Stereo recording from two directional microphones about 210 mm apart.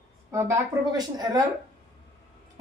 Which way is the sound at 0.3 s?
15° right (ahead or behind).